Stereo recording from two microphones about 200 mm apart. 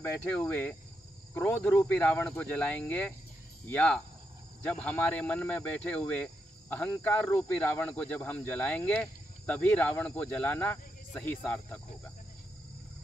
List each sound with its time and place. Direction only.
0.3 s speech: 5° left (ahead or behind)